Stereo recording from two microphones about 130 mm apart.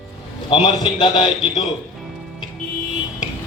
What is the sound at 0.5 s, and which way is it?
A man's voice, 45° left (ahead or behind).